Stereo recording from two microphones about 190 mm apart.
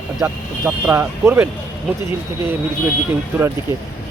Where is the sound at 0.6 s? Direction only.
10° right (ahead or behind).